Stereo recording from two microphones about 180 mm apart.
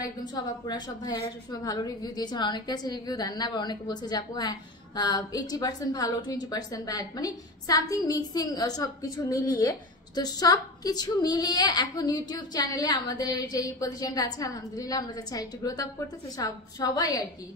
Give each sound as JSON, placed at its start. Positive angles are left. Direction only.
{"t": 0.3, "sound": "a woman's voice", "side_deg": 25}